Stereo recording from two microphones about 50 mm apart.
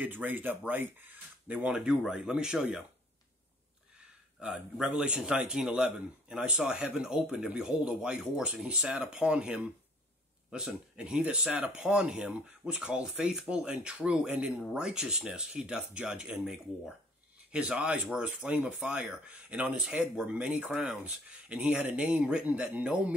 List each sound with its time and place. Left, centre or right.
0.0 s speech: right
1.6 s speech: centre
4.4 s speech: centre
20.7 s speech: centre
21.0 s speech: right